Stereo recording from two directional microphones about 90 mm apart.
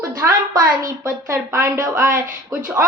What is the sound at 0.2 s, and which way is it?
A woman's voice, 35° right (ahead or behind).